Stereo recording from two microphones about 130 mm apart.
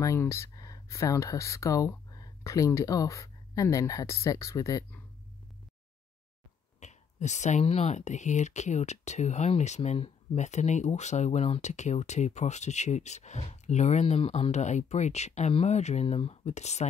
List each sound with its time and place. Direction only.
0.0 s speech: 20° left (ahead or behind)
6.8 s speech: 65° left (ahead or behind)